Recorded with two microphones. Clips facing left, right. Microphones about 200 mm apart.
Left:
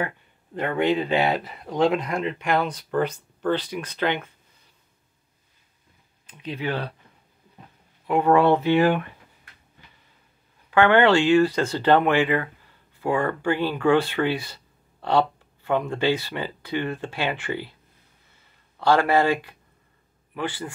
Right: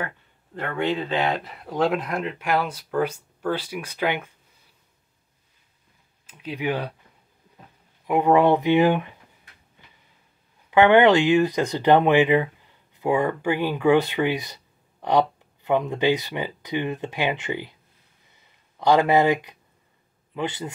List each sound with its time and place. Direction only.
0.6 s speech: 15° left (ahead or behind); by 4.3 s 10° right (ahead or behind)
6.2 s speech: 5° right (ahead or behind)
8.1 s speech: 15° right (ahead or behind)
10.7 s speech: 15° right (ahead or behind)
18.3 s a sound: 15° right (ahead or behind)
20.3 s a man's voice: 20° right (ahead or behind)